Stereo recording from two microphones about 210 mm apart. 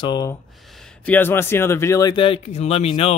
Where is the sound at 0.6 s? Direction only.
Centre (ahead or behind); by 3.1 s 30° left (ahead or behind).